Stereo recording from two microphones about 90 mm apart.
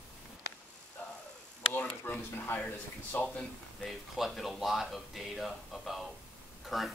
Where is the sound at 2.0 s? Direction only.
25° left (ahead or behind).